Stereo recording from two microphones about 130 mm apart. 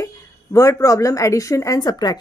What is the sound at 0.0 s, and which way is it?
Speech, 25° left (ahead or behind).